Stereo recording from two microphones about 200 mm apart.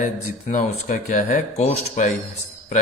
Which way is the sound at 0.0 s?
40° left (ahead or behind).